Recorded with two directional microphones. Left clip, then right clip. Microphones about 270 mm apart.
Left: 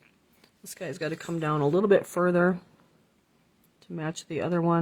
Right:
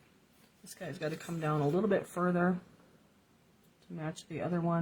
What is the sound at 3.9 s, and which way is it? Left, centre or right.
Speech, left.